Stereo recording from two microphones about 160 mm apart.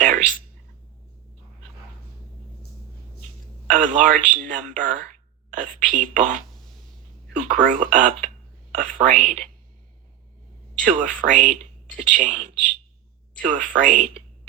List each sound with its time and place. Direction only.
0.0 s a sound: 50° right (ahead or behind)
3.7 s speech: 50° right (ahead or behind)
10.8 s speech: 50° right (ahead or behind)